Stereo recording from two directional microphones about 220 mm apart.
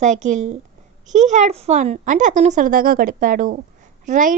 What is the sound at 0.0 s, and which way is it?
Speech, 35° right (ahead or behind).